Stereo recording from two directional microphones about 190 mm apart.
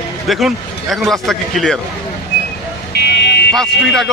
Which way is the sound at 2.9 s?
60° left (ahead or behind).